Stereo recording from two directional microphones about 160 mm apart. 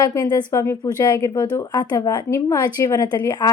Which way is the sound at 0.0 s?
20° left (ahead or behind).